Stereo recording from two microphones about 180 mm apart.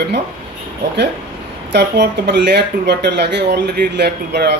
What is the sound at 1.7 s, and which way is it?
Speech, 70° right (ahead or behind).